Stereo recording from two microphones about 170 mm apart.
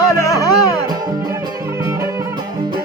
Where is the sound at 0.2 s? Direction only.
20° left (ahead or behind).